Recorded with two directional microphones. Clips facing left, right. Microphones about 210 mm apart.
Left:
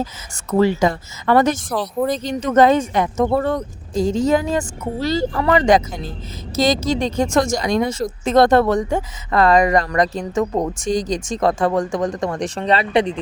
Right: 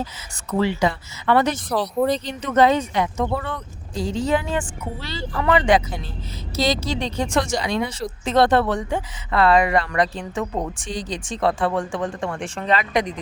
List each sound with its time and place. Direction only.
0.5 s speech: 45° left (ahead or behind)
1.7 s speech: centre (ahead or behind)
2.1 s speech: 45° left (ahead or behind)